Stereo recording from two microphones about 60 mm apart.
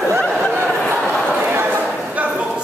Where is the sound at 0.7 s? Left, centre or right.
Left.